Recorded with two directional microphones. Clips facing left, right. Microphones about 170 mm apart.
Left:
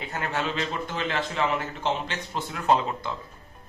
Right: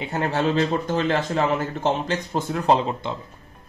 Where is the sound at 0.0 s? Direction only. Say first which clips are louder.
Right 7 dB; 30° right (ahead or behind).